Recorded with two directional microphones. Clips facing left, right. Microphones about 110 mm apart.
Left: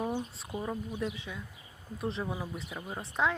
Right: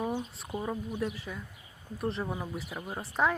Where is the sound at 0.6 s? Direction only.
5° right (ahead or behind).